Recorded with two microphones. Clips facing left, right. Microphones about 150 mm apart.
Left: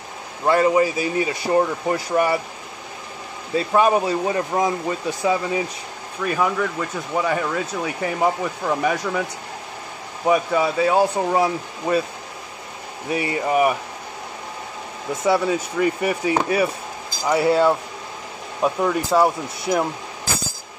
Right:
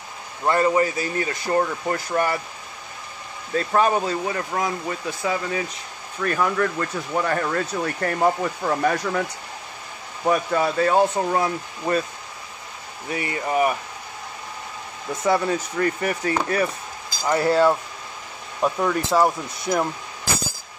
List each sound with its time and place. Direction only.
0.5 s speech: 15° left (ahead or behind)
3.5 s speech: 10° left (ahead or behind)
4.3 s speech: 20° left (ahead or behind); by 9.2 s 5° left (ahead or behind)
10.2 s speech: 5° left (ahead or behind)
13.1 s speech: 15° left (ahead or behind)
15.2 s speech: 5° left (ahead or behind)